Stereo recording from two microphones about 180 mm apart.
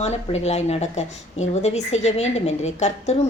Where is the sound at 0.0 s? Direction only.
35° left (ahead or behind).